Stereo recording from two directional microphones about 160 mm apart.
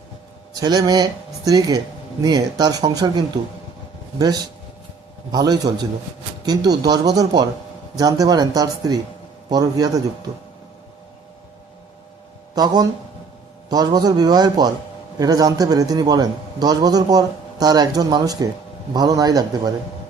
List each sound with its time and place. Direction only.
0.5 s a man's voice: 25° right (ahead or behind)
12.5 s a man's voice: 25° right (ahead or behind)